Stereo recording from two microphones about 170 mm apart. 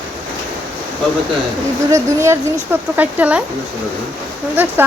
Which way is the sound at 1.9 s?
15° right (ahead or behind).